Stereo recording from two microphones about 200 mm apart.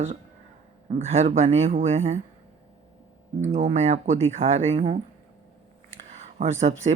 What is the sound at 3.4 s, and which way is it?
Speech, 40° right (ahead or behind).